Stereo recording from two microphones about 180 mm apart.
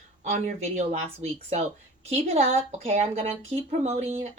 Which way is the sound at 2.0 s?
35° right (ahead or behind).